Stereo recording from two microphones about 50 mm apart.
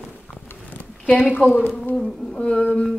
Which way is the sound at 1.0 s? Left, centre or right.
Left.